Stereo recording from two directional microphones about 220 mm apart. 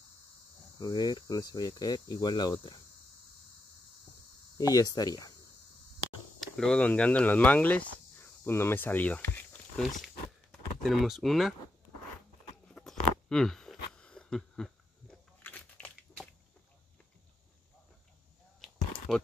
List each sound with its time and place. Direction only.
0.7 s speech: 20° left (ahead or behind)
4.6 s cricket: 15° left (ahead or behind)
6.4 s speech: centre (ahead or behind)
12.6 s a sound: centre (ahead or behind)
19.1 s speech: centre (ahead or behind)